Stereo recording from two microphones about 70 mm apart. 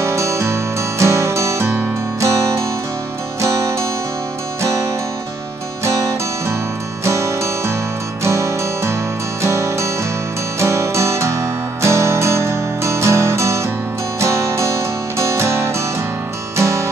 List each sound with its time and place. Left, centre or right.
0.0 s music: right
5.9 s music: right